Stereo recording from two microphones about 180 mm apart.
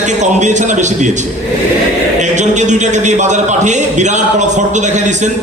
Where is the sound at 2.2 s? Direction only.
40° right (ahead or behind).